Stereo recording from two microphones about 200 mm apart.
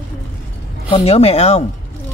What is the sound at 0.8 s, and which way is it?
Speech, 30° left (ahead or behind).